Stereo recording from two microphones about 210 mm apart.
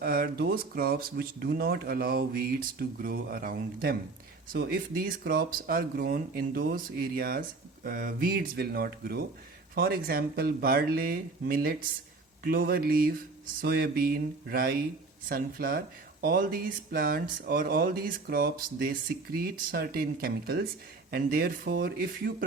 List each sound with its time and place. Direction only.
0.0 s speech: 45° right (ahead or behind)